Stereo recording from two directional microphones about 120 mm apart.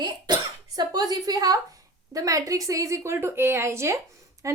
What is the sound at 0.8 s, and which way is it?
A woman's voice, 35° right (ahead or behind).